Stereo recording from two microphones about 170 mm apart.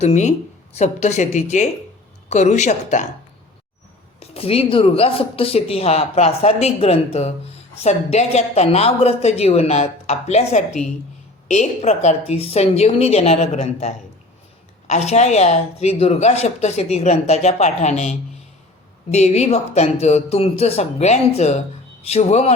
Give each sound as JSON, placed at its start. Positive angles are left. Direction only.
{"t": 0.0, "sound": "a woman's voice", "side_deg": 40}
{"t": 4.2, "sound": "speech", "side_deg": 35}
{"t": 19.1, "sound": "speech", "side_deg": 40}